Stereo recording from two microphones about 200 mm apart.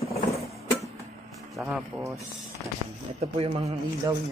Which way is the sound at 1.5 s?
5° right (ahead or behind).